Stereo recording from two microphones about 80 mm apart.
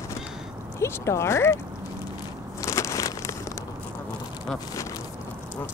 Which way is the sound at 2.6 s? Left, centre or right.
Left.